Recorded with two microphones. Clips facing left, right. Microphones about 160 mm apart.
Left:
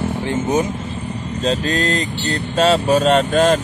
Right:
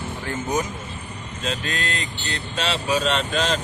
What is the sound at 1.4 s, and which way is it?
Speech, 35° left (ahead or behind).